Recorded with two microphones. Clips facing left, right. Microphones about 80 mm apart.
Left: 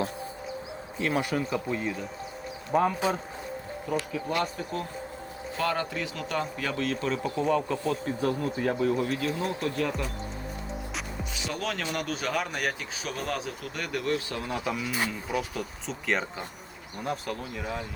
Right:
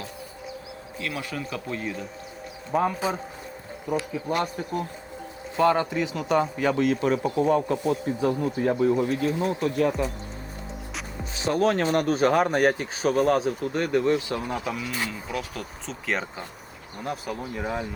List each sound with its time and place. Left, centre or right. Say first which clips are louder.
0.9 s speech: left 5 dB; left
1.7 s speech: even; centre
3.8 s speech: right 3 dB; centre
9.0 s speech: right 4 dB; centre
9.5 s speech: right 6 dB; centre
11.3 s speech: right 11 dB; right; by 14.5 s centre
14.5 s speech: right 1 dB; centre
17.5 s speech: right 5 dB; right